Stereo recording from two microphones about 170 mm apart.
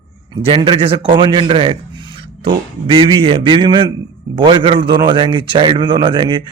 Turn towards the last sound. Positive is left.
turn(degrees=-30)  # may be behind; listen again after turning